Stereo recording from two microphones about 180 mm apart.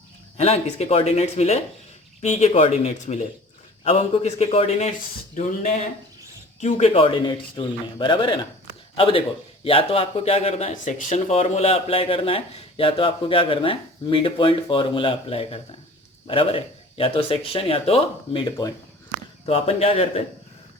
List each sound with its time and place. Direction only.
0.3 s a man's voice: 35° left (ahead or behind)